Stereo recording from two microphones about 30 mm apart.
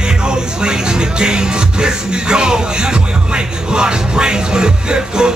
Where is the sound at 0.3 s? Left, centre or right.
Right.